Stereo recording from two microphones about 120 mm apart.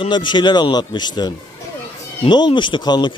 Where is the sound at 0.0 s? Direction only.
40° left (ahead or behind).